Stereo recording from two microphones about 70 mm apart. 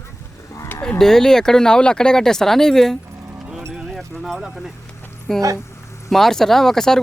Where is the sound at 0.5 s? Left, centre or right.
Left.